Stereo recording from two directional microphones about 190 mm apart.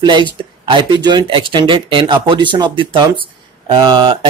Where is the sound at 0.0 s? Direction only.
25° right (ahead or behind).